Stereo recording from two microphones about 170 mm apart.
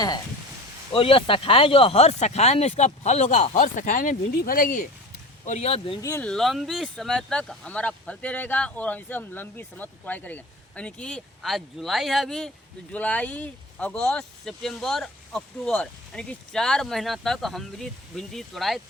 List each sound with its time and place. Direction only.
0.9 s speech: 30° left (ahead or behind); by 4.9 s 55° left (ahead or behind)
5.5 s speech: 40° left (ahead or behind)
6.0 s speech: 15° left (ahead or behind)
6.2 s speech: centre (ahead or behind)